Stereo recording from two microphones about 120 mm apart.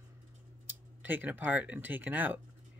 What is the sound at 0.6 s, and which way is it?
Speech, 15° right (ahead or behind).